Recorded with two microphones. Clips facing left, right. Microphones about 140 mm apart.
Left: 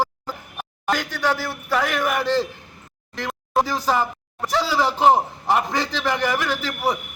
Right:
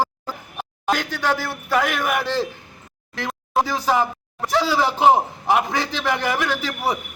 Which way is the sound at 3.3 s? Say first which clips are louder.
Even; centre (ahead or behind).